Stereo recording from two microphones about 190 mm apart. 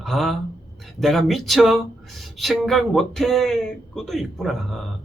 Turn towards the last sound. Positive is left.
turn(degrees=0)  # may be behind; listen again after turning